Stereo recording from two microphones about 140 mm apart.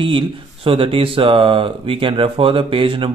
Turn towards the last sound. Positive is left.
turn(degrees=-40)  # may be behind; listen again after turning